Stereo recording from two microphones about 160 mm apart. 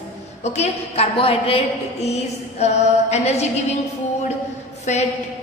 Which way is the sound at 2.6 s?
45° left (ahead or behind).